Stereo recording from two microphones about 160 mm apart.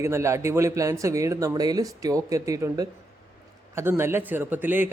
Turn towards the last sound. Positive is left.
turn(degrees=-10)  # may be behind; listen again after turning